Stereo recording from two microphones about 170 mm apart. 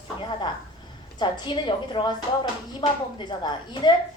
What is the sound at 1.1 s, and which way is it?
Speech, 25° left (ahead or behind).